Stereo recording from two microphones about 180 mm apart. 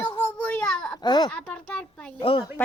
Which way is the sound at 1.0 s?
25° left (ahead or behind).